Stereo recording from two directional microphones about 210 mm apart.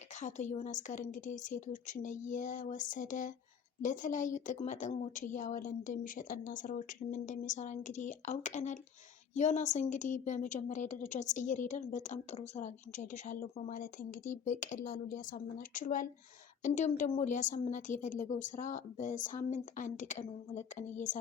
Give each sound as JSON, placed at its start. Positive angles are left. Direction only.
{"t": 0.2, "sound": "a woman's voice", "side_deg": 35}